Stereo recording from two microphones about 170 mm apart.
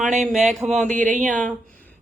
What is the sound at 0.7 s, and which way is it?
Speech, 45° right (ahead or behind).